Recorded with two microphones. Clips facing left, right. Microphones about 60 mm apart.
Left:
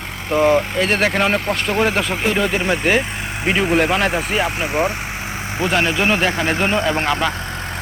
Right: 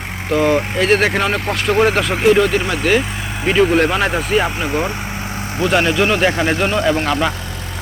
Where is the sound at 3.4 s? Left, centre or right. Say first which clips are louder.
Right 3 dB; centre.